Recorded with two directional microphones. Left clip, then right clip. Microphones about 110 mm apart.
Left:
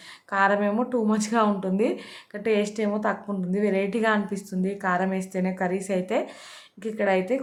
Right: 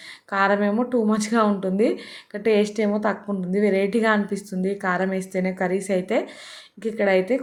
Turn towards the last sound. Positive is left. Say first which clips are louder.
# right 4 dB
turn(degrees=-25)  # may be behind; listen again after turning